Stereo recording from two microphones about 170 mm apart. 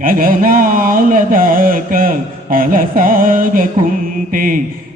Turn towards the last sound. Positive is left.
turn(degrees=-50)  # may be behind; listen again after turning